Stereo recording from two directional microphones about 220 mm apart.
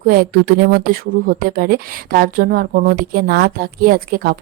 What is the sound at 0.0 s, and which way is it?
Speech, 45° right (ahead or behind).